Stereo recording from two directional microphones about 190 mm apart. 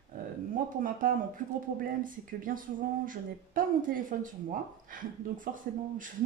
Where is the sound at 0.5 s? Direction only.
45° right (ahead or behind).